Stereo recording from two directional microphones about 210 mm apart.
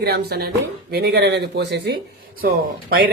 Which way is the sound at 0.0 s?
50° right (ahead or behind).